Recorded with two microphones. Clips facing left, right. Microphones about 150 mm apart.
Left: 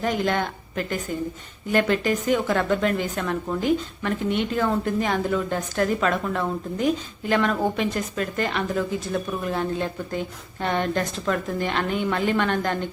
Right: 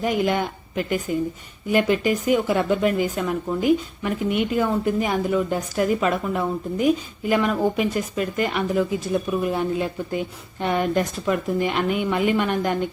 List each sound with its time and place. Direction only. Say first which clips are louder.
0.0 s speech: right 2 dB; 10° right (ahead or behind)